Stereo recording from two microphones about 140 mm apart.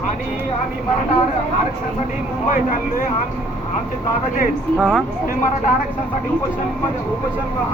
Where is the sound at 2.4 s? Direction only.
75° left (ahead or behind).